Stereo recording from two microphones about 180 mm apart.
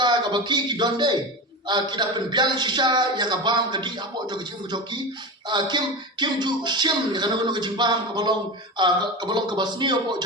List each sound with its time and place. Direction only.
0.0 s a man's voice: 25° right (ahead or behind)